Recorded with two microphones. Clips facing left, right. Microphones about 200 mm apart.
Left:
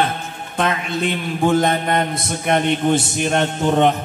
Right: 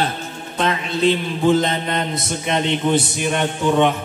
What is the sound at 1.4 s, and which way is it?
Mantra, 50° left (ahead or behind).